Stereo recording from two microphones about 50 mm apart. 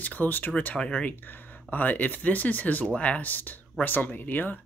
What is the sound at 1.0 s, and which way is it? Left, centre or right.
Speech, left.